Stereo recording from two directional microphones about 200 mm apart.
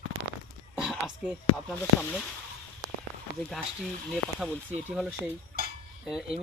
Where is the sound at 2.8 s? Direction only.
20° right (ahead or behind).